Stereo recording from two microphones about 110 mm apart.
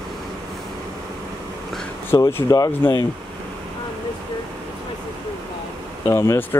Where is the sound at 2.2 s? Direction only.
35° left (ahead or behind).